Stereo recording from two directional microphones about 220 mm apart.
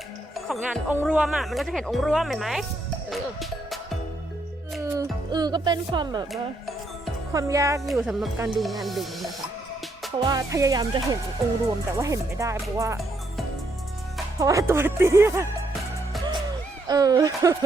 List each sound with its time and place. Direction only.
0.3 s speech: centre (ahead or behind)
4.8 s speech: 15° right (ahead or behind)
7.3 s speech: 15° right (ahead or behind)
10.2 s speech: 15° right (ahead or behind)
14.3 s speech: 15° right (ahead or behind)
16.9 s speech: 15° right (ahead or behind)